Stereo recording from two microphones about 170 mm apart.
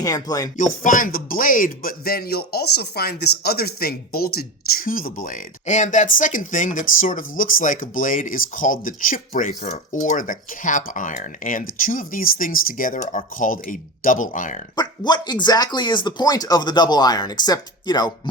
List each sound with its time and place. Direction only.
0.0 s speech: 20° left (ahead or behind)
0.5 s speech: 50° left (ahead or behind)
14.8 s speech: 25° left (ahead or behind)